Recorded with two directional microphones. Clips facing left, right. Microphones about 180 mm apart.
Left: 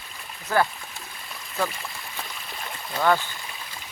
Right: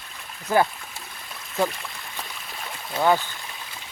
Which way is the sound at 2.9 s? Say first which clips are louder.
Right 1 dB; 15° right (ahead or behind).